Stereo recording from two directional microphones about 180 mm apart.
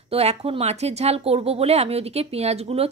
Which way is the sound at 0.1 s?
35° right (ahead or behind).